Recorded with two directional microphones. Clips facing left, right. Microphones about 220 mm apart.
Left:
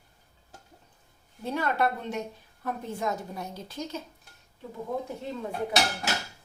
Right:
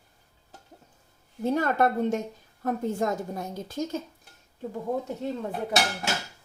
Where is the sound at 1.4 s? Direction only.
45° right (ahead or behind).